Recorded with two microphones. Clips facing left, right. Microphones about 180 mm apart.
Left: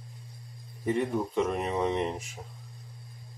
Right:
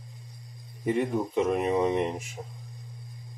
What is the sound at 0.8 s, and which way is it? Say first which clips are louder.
Speech: right 2 dB; 15° right (ahead or behind).